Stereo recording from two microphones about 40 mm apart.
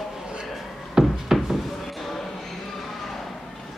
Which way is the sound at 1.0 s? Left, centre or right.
Centre.